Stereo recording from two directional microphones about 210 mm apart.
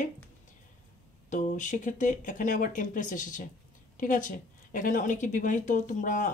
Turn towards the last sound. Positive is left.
turn(degrees=40)  # may be behind; listen again after turning